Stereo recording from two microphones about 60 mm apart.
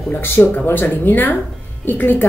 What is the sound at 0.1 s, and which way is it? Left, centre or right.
Speech, left.